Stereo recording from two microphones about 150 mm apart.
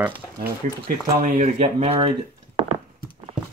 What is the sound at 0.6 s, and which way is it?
Speech, 55° right (ahead or behind).